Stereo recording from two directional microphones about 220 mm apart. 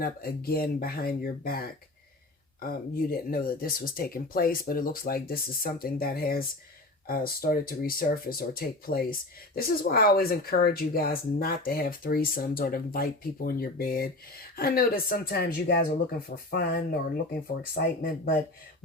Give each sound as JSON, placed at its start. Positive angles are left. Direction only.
{"t": 0.0, "sound": "speech", "side_deg": 45}